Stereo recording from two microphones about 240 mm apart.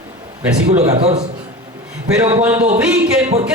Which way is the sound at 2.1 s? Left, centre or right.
Centre.